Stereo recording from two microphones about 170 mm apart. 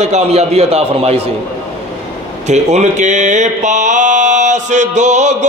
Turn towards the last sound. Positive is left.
turn(degrees=-45)  # may be behind; listen again after turning